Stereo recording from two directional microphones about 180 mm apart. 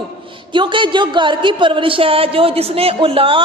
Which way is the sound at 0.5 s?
25° right (ahead or behind).